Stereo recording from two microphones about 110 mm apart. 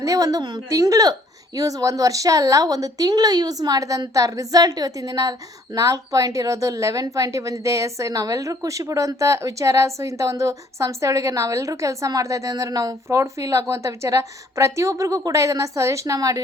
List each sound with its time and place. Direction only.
0.0 s a woman's voice: 30° right (ahead or behind)